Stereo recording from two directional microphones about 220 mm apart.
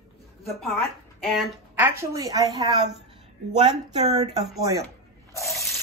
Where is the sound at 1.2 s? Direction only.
Centre (ahead or behind); by 2.6 s 15° right (ahead or behind).